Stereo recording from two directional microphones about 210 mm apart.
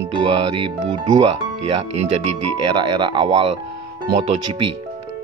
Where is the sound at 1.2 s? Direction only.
25° right (ahead or behind).